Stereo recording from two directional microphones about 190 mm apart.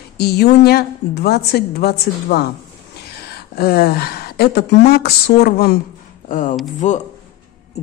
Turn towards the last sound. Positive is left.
turn(degrees=40)  # may be behind; listen again after turning